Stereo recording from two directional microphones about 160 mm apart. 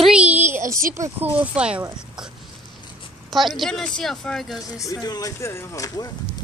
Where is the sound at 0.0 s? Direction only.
5° right (ahead or behind).